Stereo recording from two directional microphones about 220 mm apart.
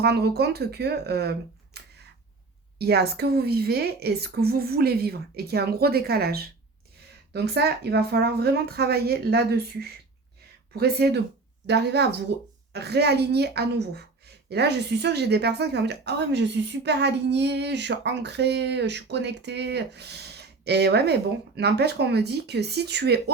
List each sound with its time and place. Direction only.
0.0 s a woman's voice: 45° right (ahead or behind)